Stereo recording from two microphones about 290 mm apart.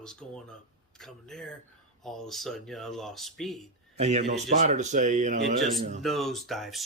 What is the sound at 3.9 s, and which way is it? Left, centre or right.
Speech, right.